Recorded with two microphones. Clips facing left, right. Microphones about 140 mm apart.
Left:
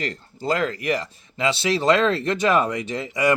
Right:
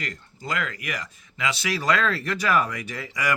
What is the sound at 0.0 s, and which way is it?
Speech, 30° left (ahead or behind).